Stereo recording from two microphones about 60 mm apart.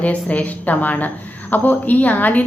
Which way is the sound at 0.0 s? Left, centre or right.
Left.